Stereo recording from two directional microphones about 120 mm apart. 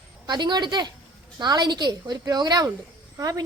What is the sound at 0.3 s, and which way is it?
A woman's voice, 35° right (ahead or behind).